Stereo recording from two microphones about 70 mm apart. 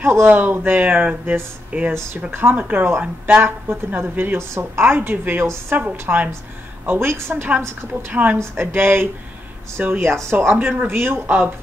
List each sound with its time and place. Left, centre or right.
0.0 s a woman's voice: right
6.9 s a woman's voice: right